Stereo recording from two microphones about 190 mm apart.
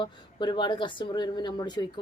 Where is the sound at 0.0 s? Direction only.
25° left (ahead or behind).